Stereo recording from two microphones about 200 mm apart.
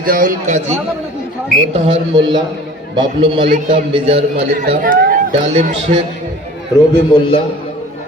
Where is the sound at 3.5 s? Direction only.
40° right (ahead or behind).